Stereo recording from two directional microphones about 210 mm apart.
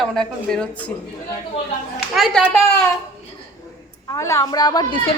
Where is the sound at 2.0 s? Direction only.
Centre (ahead or behind).